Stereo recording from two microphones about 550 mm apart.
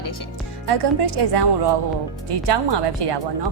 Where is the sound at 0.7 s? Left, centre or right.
Right.